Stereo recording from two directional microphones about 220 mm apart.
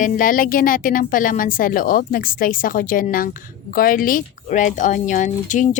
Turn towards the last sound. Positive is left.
turn(degrees=35)  # may be behind; listen again after turning